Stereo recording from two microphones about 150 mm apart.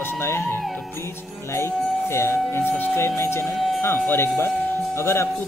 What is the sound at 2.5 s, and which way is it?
A man's voice, 15° left (ahead or behind).